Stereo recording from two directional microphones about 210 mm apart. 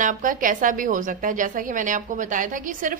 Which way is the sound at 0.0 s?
40° right (ahead or behind).